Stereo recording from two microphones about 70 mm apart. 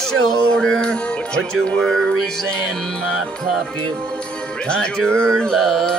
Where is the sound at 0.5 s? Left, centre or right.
Centre.